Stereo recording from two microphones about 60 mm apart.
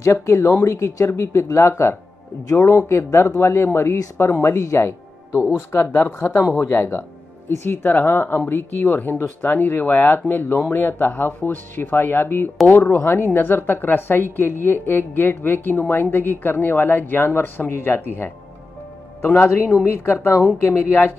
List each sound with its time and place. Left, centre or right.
0.0 s speech: left
5.9 s a woman's voice: left